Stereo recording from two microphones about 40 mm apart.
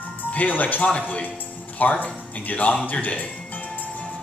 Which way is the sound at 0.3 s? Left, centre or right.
Left.